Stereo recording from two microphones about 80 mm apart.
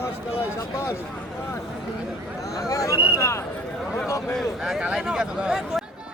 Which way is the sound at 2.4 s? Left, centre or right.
Left.